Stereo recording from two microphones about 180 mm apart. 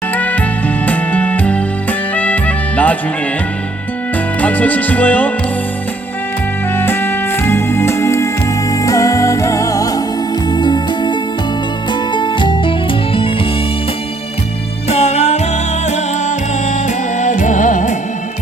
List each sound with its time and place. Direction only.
0.2 s music: 10° left (ahead or behind)
4.4 s speech: 10° left (ahead or behind)
6.7 s music: 10° left (ahead or behind); by 13.5 s 30° left (ahead or behind)
14.8 s music: 35° left (ahead or behind)